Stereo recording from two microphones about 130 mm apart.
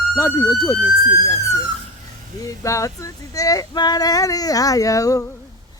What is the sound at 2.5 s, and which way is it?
Speech, 25° left (ahead or behind).